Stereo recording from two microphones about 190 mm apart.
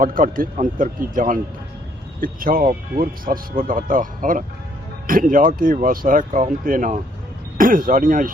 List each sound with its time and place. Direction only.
0.0 s speech: 45° right (ahead or behind)